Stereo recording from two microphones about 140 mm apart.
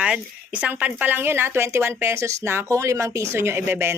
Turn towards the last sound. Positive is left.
turn(degrees=-15)  # may be behind; listen again after turning